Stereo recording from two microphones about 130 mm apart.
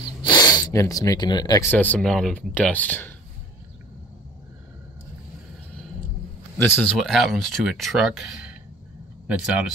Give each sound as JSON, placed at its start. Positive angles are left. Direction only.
{"t": 0.2, "sound": "speech", "side_deg": 30}
{"t": 1.7, "sound": "speech", "side_deg": 10}
{"t": 6.6, "sound": "speech", "side_deg": 15}
{"t": 7.0, "sound": "speech", "side_deg": 0}